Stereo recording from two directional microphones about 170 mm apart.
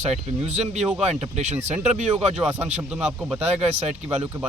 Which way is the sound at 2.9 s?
5° right (ahead or behind).